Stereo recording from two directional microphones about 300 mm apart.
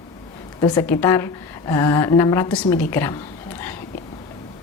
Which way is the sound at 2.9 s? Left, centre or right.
Centre.